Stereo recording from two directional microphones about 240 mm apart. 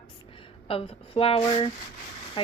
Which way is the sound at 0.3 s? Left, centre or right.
Left.